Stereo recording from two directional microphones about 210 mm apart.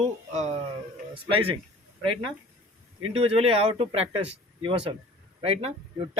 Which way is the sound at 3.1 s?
30° right (ahead or behind).